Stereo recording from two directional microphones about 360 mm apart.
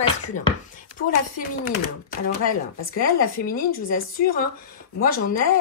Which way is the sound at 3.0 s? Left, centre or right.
Left.